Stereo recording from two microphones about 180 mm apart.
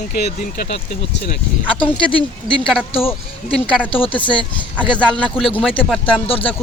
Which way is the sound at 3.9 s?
30° left (ahead or behind).